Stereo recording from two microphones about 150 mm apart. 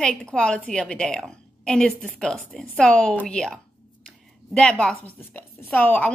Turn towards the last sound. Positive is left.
turn(degrees=10)  # may be behind; listen again after turning